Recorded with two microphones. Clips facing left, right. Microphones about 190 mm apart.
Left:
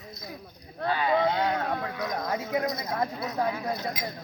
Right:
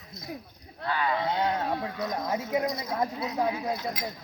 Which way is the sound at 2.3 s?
15° right (ahead or behind).